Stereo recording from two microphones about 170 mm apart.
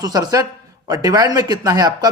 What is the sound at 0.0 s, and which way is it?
A man's voice, 25° right (ahead or behind).